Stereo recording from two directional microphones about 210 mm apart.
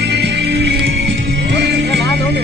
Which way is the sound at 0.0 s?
50° right (ahead or behind).